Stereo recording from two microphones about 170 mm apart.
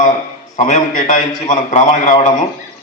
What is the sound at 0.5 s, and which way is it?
A man's voice, 45° left (ahead or behind).